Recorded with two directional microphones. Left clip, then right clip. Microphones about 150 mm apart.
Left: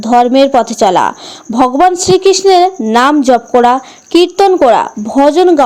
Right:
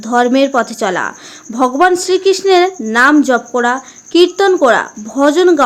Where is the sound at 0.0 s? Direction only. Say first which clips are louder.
Left 4 dB; 20° left (ahead or behind).